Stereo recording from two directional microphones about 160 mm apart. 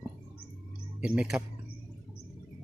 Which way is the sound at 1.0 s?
5° right (ahead or behind).